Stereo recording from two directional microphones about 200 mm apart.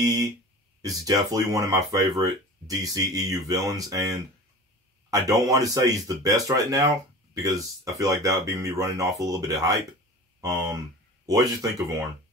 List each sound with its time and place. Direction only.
0.0 s speech: 20° right (ahead or behind)
5.5 s speech: 15° right (ahead or behind)